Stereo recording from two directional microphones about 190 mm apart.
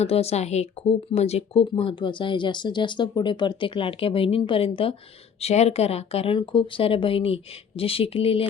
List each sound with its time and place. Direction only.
0.0 s speech: 35° left (ahead or behind)